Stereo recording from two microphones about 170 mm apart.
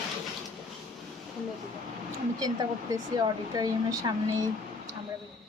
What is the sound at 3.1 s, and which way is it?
Speech, 20° right (ahead or behind).